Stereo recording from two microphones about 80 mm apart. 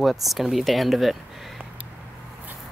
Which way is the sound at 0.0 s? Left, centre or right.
Centre.